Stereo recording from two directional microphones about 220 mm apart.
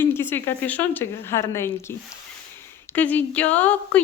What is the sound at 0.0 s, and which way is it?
A woman's voice, 10° left (ahead or behind).